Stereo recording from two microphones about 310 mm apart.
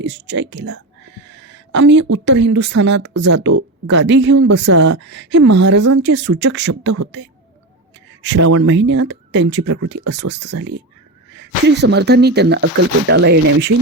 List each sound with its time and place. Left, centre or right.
0.0 s speech: right
1.3 s a sound: right
2.1 s speech: right